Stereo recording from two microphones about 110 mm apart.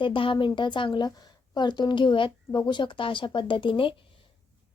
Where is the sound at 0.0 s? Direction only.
50° left (ahead or behind).